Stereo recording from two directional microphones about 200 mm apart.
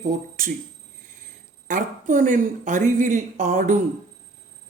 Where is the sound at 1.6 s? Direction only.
40° right (ahead or behind).